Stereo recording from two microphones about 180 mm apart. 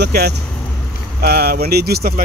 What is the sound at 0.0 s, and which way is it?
Speech, 65° right (ahead or behind).